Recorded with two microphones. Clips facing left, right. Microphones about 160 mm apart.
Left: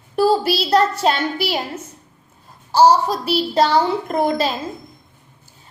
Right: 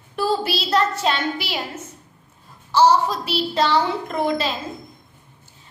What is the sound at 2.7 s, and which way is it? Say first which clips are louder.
A child's voice: left 3 dB; 40° left (ahead or behind).